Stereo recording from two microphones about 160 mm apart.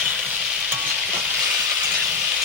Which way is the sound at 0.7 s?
15° right (ahead or behind).